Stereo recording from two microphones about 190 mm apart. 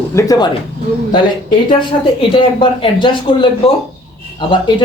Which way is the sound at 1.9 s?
35° left (ahead or behind).